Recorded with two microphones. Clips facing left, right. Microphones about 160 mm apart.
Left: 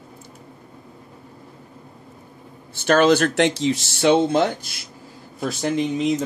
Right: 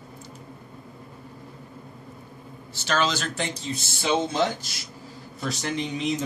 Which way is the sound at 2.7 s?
55° left (ahead or behind).